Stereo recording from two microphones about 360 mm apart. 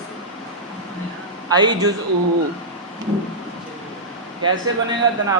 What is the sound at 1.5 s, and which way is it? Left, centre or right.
Speech, centre.